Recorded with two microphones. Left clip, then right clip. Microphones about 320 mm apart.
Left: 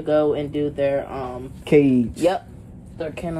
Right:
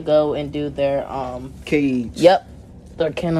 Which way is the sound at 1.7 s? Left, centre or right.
Centre.